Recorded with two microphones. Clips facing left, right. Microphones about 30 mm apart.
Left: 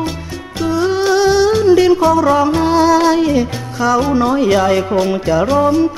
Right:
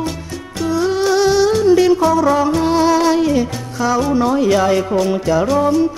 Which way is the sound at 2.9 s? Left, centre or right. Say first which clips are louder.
Left 2 dB; centre.